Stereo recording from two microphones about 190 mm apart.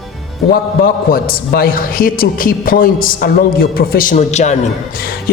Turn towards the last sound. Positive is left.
turn(degrees=35)  # may be behind; listen again after turning